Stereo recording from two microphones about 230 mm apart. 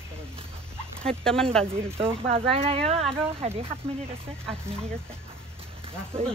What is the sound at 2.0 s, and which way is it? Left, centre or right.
Speech, right.